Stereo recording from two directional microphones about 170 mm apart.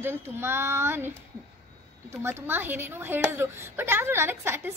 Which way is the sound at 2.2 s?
15° right (ahead or behind).